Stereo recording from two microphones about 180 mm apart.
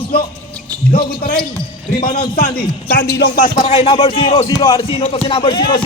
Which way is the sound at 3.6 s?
30° left (ahead or behind).